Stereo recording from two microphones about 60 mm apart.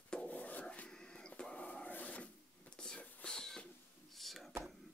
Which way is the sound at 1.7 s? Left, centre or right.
Left.